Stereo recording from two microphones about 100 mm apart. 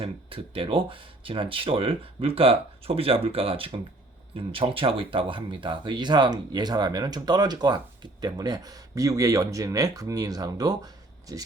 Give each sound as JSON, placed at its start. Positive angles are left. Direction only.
{"t": 0.0, "sound": "speech", "side_deg": -65}